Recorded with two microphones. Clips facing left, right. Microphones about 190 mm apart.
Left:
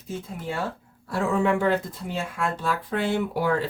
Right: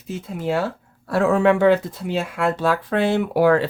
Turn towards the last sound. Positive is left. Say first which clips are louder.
# right 8 dB
turn(degrees=-80)